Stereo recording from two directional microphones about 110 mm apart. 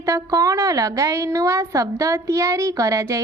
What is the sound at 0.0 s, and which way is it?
A woman's voice, 30° right (ahead or behind).